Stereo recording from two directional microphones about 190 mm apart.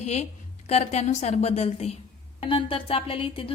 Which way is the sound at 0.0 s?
35° left (ahead or behind).